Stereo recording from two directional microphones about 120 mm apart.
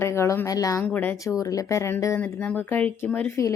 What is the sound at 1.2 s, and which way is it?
Speech, 30° left (ahead or behind).